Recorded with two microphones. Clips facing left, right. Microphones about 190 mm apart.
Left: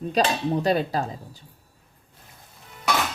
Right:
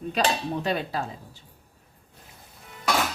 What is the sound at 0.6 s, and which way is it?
Speech, 40° left (ahead or behind).